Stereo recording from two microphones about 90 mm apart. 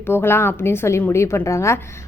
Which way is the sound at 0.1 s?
25° left (ahead or behind).